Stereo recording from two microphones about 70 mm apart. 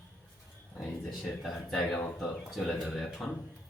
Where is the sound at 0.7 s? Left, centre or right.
Centre.